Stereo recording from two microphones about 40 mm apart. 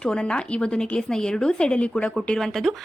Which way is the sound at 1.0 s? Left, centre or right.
Centre.